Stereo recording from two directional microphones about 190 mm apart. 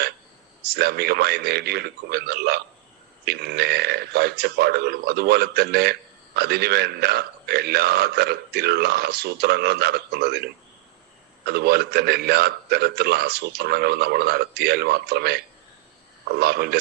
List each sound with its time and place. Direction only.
0.8 s a man's voice: 55° right (ahead or behind)